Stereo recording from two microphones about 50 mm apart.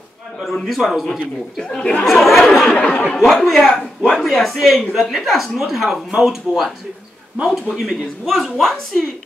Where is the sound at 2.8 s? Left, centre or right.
Left.